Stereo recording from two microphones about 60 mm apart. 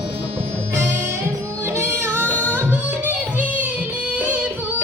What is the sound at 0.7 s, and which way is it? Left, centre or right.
Music, right.